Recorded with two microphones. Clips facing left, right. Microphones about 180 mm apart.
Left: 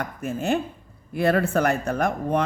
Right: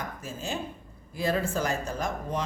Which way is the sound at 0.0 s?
60° left (ahead or behind).